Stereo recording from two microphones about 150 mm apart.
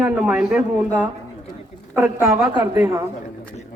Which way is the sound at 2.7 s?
20° right (ahead or behind).